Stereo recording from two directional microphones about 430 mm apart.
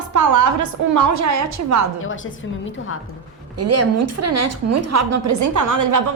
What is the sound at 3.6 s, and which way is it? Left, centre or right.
A woman's voice, right.